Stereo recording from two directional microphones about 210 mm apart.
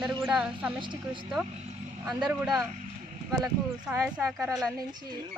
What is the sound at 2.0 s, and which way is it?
Speech, centre (ahead or behind).